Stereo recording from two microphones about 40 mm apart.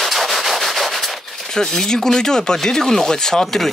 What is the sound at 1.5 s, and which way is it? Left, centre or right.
Speech, centre.